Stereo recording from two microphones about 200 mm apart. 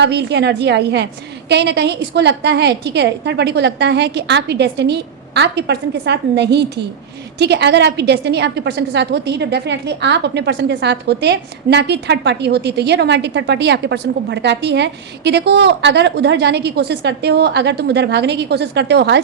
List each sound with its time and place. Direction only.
0.0 s a woman's voice: 55° right (ahead or behind)